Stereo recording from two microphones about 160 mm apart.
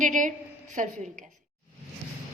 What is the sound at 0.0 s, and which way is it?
Speech, 50° right (ahead or behind).